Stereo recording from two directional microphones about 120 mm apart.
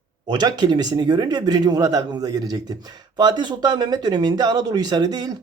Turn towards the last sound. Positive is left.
turn(degrees=-30)  # may be behind; listen again after turning